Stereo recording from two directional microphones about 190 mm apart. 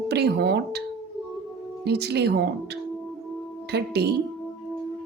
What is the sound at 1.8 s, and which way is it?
Speech, 60° right (ahead or behind).